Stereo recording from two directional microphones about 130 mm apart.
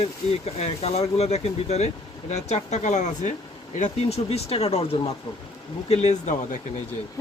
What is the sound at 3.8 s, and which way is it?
Speech, 55° left (ahead or behind).